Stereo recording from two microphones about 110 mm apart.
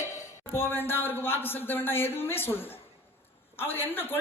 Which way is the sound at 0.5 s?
20° left (ahead or behind).